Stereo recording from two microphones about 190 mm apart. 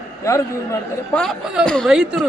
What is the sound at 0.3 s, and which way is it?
Speech, 15° left (ahead or behind).